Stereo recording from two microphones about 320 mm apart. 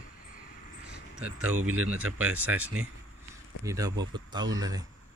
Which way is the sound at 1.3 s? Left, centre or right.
Right.